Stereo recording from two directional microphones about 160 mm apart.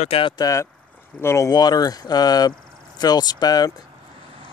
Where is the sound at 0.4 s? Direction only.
20° left (ahead or behind).